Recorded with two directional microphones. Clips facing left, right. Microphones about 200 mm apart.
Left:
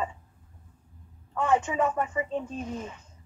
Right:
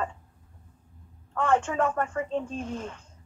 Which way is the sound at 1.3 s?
10° left (ahead or behind).